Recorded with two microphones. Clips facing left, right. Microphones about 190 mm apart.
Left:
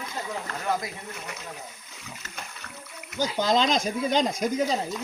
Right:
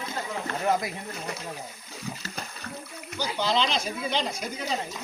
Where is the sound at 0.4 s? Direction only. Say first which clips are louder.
Right 5 dB; 30° right (ahead or behind).